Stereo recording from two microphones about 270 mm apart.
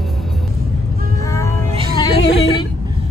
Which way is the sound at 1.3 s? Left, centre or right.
Centre.